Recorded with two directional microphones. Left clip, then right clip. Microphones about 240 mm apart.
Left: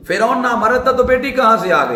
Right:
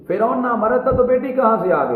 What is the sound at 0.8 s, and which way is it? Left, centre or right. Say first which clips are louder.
A man's voice: left 3 dB; centre.